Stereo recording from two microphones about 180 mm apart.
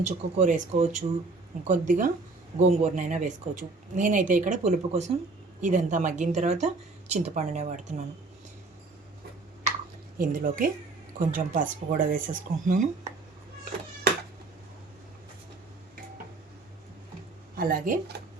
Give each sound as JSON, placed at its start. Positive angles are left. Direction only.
{"t": 0.0, "sound": "speech", "side_deg": -40}
{"t": 10.2, "sound": "speech", "side_deg": -50}
{"t": 17.6, "sound": "speech", "side_deg": -50}